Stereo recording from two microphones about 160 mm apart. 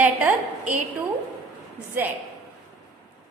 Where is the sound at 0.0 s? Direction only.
10° right (ahead or behind).